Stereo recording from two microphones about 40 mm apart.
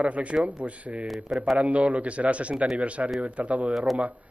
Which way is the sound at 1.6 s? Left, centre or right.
Right.